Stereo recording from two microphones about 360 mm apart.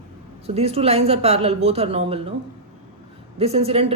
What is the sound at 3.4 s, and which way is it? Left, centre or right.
Speech, centre.